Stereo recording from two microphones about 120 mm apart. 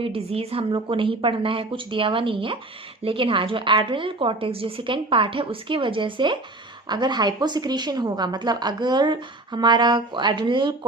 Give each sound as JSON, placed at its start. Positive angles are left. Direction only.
{"t": 0.0, "sound": "a woman's voice", "side_deg": -50}